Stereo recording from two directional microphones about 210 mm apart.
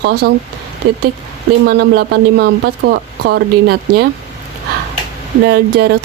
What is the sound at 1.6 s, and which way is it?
Speech, 50° right (ahead or behind).